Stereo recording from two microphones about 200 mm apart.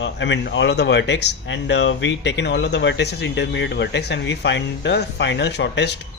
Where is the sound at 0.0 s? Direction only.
60° left (ahead or behind).